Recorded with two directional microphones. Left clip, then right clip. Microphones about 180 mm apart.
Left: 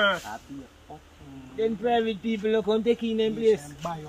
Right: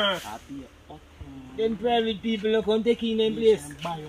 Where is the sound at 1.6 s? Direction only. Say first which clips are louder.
Even; 10° right (ahead or behind).